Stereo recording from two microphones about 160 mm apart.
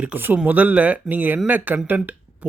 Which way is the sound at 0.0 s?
10° right (ahead or behind).